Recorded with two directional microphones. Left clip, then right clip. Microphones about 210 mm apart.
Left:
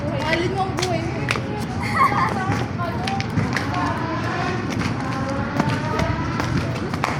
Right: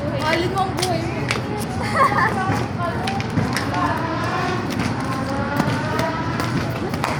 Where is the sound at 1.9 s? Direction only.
50° left (ahead or behind).